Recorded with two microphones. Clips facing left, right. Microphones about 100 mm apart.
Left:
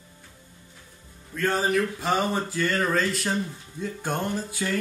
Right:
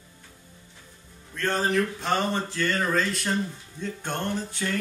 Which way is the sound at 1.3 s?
5° left (ahead or behind).